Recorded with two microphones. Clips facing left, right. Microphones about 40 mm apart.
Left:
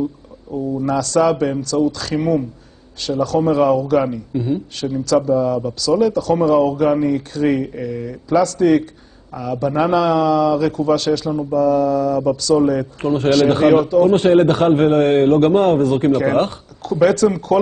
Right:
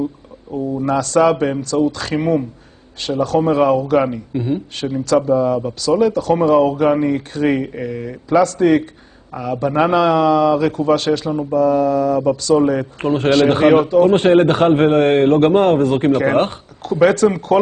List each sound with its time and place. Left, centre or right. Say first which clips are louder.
0.5 s a man's voice: right 1 dB; right